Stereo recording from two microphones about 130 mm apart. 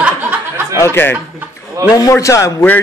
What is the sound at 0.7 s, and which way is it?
A man's voice, 20° left (ahead or behind).